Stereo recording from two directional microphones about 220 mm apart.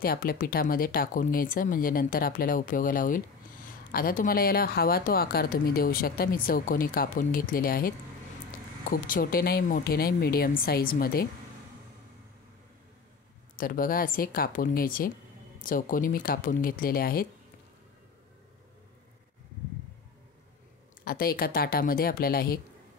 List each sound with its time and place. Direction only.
0.0 s speech: 40° left (ahead or behind)
8.9 s speech: 40° left (ahead or behind)
13.6 s speech: 40° left (ahead or behind)
21.0 s speech: 40° left (ahead or behind)